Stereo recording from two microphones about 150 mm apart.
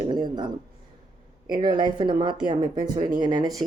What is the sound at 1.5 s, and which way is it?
A woman's voice, 30° right (ahead or behind).